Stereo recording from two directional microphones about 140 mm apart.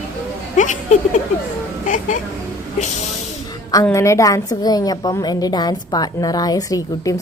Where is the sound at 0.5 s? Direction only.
60° left (ahead or behind).